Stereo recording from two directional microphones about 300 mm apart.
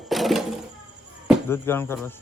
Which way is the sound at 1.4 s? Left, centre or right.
Centre.